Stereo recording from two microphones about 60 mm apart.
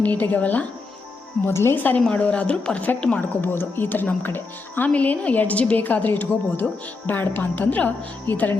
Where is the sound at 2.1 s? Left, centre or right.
Left.